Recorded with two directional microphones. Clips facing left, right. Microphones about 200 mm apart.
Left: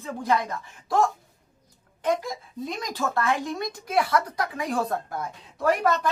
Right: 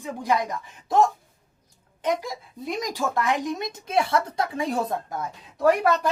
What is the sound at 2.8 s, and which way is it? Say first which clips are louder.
Speech: right 1 dB; 15° right (ahead or behind).